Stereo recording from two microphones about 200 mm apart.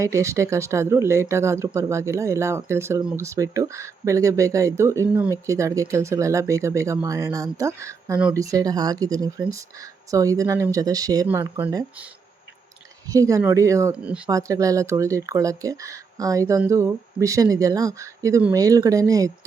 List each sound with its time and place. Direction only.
0.0 s speech: 15° right (ahead or behind)
13.1 s speech: 15° right (ahead or behind)